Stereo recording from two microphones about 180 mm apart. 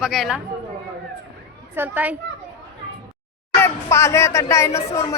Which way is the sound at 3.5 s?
15° left (ahead or behind).